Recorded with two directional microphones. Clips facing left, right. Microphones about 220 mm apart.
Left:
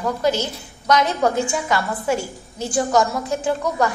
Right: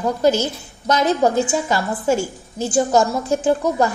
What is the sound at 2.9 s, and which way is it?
A woman's voice, 25° right (ahead or behind).